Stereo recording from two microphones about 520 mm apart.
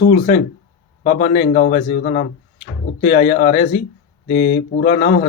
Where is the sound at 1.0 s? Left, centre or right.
Centre.